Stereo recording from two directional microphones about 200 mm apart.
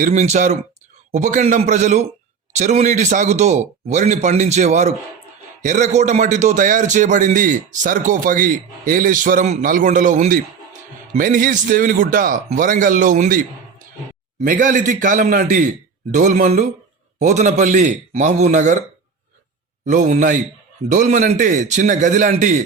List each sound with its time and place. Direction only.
0.0 s a man's voice: 35° right (ahead or behind)
19.8 s a man's voice: 40° right (ahead or behind)